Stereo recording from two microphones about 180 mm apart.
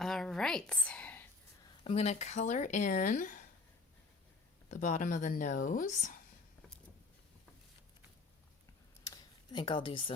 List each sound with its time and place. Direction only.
0.0 s a woman's voice: centre (ahead or behind)
1.8 s speech: 35° left (ahead or behind); by 3.4 s 50° left (ahead or behind)
4.7 s speech: 45° left (ahead or behind)
9.0 s a sound: 25° left (ahead or behind)